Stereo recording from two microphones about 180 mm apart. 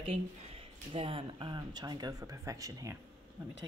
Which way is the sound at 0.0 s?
30° right (ahead or behind).